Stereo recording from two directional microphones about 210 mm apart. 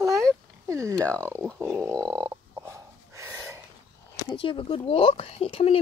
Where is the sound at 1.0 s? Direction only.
5° left (ahead or behind).